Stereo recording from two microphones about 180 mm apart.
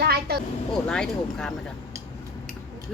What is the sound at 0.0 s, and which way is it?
Vehicle, 60° right (ahead or behind).